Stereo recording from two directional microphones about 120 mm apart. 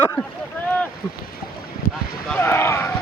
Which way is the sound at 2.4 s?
20° left (ahead or behind).